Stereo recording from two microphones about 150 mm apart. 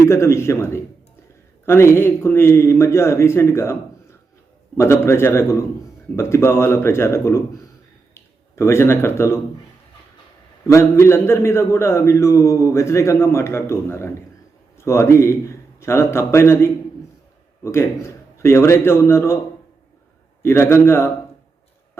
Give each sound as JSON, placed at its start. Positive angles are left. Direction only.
{"t": 0.0, "sound": "a man's voice", "side_deg": 20}
{"t": 10.7, "sound": "a man's voice", "side_deg": 20}
{"t": 20.4, "sound": "a man's voice", "side_deg": 15}